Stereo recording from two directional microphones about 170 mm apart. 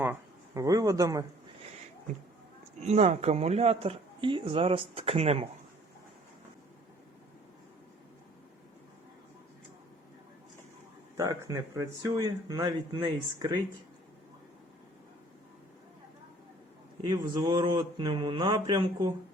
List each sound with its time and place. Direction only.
0.0 s a sound: 15° right (ahead or behind)
2.8 s speech: 40° right (ahead or behind)
11.2 s speech: 20° right (ahead or behind)
17.0 s speech: 25° right (ahead or behind)